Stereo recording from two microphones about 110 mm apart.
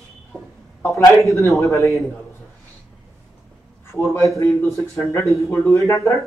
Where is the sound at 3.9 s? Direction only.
25° left (ahead or behind).